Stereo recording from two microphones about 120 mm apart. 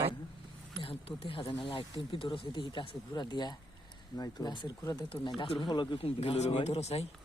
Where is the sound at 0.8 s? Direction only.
50° left (ahead or behind).